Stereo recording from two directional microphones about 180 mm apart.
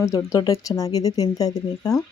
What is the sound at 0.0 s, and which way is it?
Speech, 20° left (ahead or behind).